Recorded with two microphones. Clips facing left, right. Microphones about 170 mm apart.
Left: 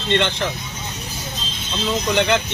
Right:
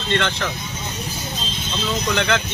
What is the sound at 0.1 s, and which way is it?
Speech, 20° left (ahead or behind).